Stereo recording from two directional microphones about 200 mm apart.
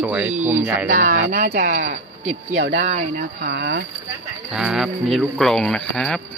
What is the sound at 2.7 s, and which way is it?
Speech, 35° right (ahead or behind).